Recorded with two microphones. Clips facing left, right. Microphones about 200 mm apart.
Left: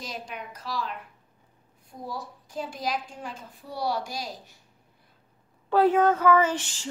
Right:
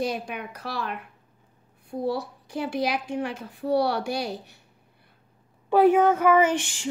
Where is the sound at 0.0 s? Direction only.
60° right (ahead or behind).